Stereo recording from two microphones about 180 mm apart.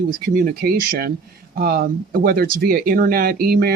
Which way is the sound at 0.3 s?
50° right (ahead or behind).